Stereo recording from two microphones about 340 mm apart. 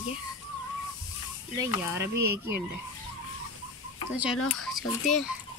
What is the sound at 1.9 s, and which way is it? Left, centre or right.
Speech, right.